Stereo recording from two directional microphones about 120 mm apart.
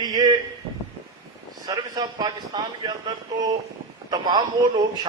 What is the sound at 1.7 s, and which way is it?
A man's voice, 35° right (ahead or behind).